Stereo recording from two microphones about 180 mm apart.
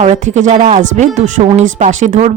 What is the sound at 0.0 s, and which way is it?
Speech, 40° right (ahead or behind).